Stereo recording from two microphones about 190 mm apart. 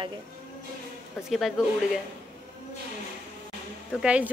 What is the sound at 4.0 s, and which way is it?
Speech, 5° right (ahead or behind).